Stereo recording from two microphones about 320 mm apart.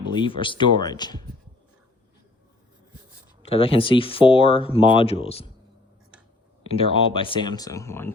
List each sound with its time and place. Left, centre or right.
0.1 s speech: centre
3.4 s speech: centre
6.7 s speech: centre